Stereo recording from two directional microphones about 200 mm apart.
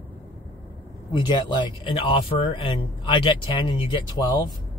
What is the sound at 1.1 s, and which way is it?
Speech, 20° left (ahead or behind).